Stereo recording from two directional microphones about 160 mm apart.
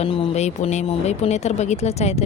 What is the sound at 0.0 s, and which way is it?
A woman's voice, 35° left (ahead or behind).